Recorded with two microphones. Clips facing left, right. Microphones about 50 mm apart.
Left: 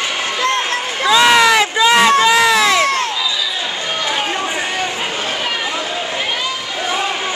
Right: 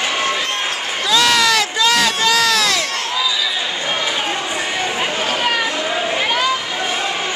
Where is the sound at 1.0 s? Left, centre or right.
Left.